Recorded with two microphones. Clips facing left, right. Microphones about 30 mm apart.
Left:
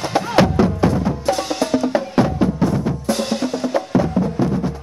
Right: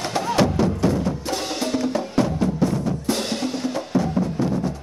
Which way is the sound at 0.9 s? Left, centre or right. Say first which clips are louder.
Left 4 dB; centre.